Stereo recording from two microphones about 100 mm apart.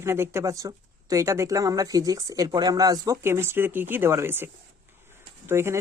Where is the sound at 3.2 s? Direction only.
25° right (ahead or behind).